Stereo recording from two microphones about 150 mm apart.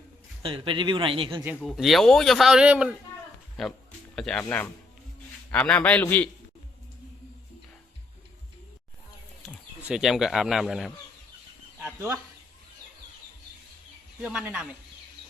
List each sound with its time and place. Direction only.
0.4 s speech: 35° right (ahead or behind)
1.6 s a man's voice: centre (ahead or behind)
9.8 s speech: 5° right (ahead or behind)
11.8 s a sound: 15° right (ahead or behind)
14.3 s speech: 10° right (ahead or behind)